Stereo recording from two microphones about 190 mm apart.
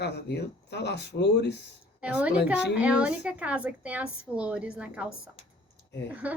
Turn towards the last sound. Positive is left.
turn(degrees=-10)  # may be behind; listen again after turning